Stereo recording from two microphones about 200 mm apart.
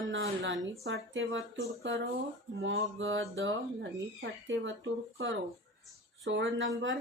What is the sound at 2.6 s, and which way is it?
Speech, 70° right (ahead or behind).